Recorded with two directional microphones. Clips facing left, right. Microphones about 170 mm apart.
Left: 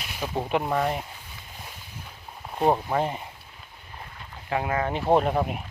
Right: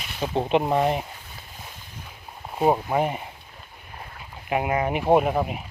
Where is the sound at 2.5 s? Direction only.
5° right (ahead or behind).